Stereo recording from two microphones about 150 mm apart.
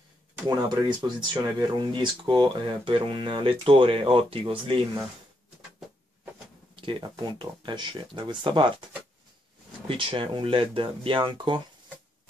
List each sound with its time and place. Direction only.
0.5 s speech: 30° right (ahead or behind)
6.7 s speech: 35° right (ahead or behind)
9.8 s speech: 35° right (ahead or behind)